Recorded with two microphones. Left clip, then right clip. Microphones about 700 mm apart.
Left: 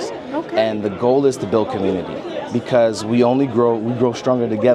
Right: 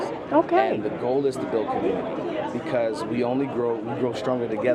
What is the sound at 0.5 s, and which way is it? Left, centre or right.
A man's voice, left.